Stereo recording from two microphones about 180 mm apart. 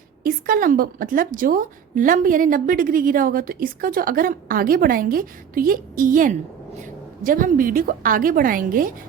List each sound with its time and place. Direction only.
0.2 s a woman's voice: 55° right (ahead or behind)